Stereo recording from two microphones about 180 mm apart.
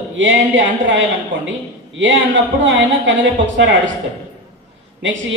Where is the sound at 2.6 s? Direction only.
90° right.